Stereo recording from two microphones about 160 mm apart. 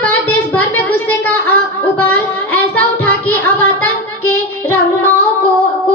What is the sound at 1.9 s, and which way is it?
Child singing, 10° left (ahead or behind).